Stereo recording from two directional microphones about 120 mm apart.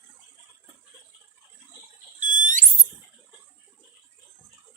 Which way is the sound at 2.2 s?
90° right.